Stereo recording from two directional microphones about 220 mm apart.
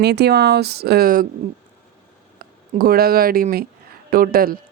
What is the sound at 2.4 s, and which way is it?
Speech, 40° right (ahead or behind).